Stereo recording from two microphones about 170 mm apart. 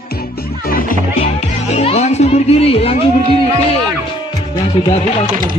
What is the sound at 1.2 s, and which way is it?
Speech, 40° left (ahead or behind).